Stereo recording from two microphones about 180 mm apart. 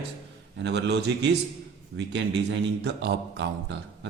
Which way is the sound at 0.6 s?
70° right (ahead or behind).